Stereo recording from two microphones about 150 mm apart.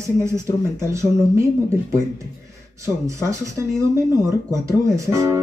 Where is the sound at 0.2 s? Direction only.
20° right (ahead or behind).